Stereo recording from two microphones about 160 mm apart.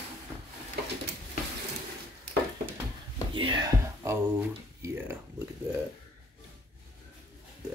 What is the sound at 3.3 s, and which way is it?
Whispering, 30° right (ahead or behind).